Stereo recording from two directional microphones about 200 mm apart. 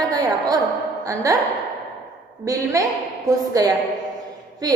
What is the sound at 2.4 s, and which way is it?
A woman's voice, 15° right (ahead or behind).